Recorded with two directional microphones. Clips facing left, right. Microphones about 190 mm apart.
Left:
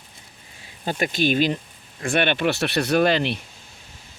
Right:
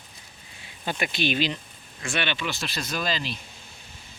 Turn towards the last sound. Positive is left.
turn(degrees=65)  # may be behind; listen again after turning